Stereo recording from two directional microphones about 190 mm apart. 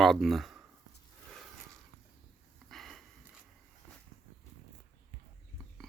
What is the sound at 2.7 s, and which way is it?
Sniff, centre (ahead or behind).